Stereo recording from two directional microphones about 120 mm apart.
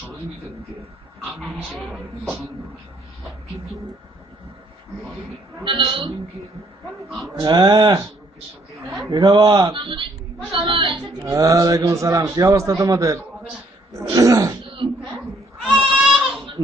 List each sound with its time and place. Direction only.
1.7 s speech: 5° right (ahead or behind)
5.6 s a woman's voice: 45° right (ahead or behind)
7.3 s a man's voice: 35° right (ahead or behind)
9.0 s a man's voice: 35° right (ahead or behind)
11.2 s a man's voice: 30° right (ahead or behind)
14.6 s a sound: 45° right (ahead or behind)
15.7 s goat: 5° right (ahead or behind)